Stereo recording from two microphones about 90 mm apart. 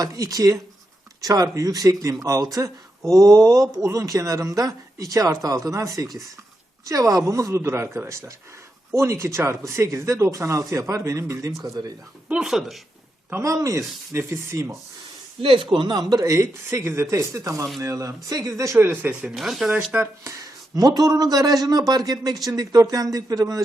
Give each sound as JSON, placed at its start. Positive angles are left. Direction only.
{"t": 0.0, "sound": "speech", "side_deg": -40}
{"t": 12.3, "sound": "speech", "side_deg": -5}
{"t": 13.4, "sound": "speech", "side_deg": -40}
{"t": 15.4, "sound": "speech", "side_deg": -80}
{"t": 18.8, "sound": "speech", "side_deg": -25}
{"t": 19.2, "sound": "speech", "side_deg": 0}
{"t": 20.2, "sound": "a man's voice", "side_deg": -40}